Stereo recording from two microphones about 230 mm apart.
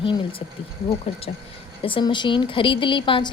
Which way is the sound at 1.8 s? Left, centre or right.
Left.